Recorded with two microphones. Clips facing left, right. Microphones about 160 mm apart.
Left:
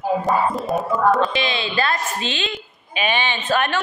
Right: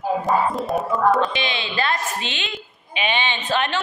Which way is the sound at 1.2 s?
20° right (ahead or behind).